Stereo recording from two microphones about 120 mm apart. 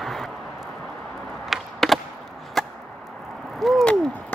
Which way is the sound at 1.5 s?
Centre (ahead or behind).